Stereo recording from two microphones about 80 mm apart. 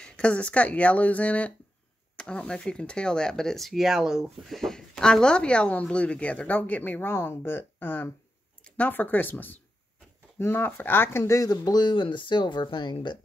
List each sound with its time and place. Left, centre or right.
0.0 s speech: centre; by 11.2 s left
11.2 s speech: left